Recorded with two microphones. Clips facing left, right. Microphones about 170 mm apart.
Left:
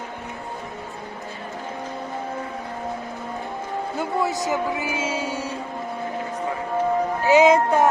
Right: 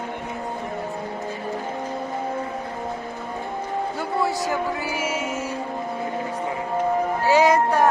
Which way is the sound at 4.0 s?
20° left (ahead or behind).